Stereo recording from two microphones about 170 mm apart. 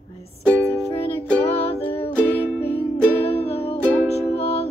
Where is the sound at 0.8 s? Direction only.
35° left (ahead or behind).